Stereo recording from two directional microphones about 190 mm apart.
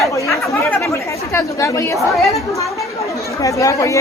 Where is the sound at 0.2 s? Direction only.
15° left (ahead or behind).